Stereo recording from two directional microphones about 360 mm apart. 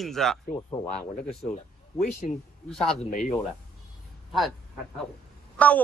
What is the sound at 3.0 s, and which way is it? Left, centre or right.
Speech, left.